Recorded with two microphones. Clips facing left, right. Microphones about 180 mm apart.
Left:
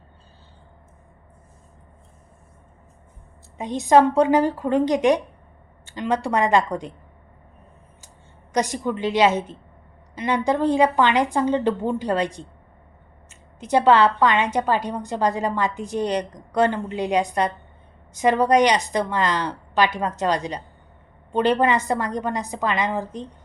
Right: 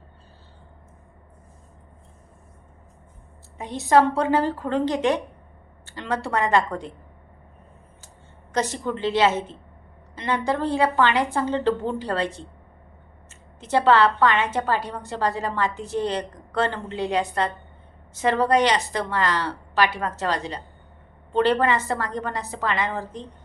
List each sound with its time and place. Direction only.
3.6 s a woman's voice: 15° left (ahead or behind)
8.5 s a woman's voice: 15° left (ahead or behind)
13.6 s a woman's voice: 15° left (ahead or behind)